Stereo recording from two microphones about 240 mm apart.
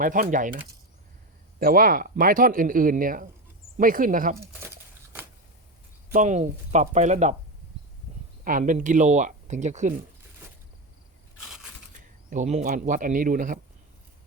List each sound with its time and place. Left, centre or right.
0.0 s speech: right
6.1 s speech: right
8.4 s speech: right
12.3 s speech: right